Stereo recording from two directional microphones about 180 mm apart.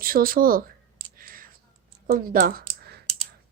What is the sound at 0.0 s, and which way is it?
Speech, 55° right (ahead or behind).